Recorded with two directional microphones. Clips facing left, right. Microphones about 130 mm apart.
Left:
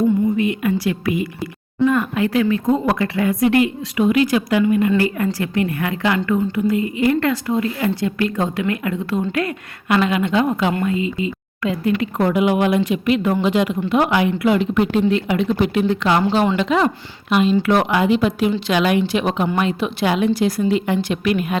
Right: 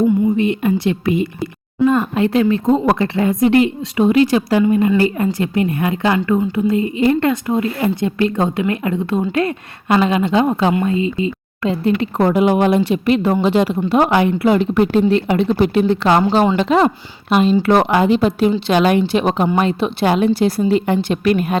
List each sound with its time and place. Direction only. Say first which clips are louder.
0.3 s a woman's voice: right 3 dB; 30° right (ahead or behind)